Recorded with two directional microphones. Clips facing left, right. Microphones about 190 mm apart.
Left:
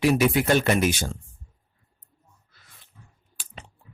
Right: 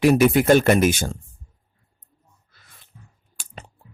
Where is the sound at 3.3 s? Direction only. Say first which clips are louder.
Right 3 dB; 45° right (ahead or behind).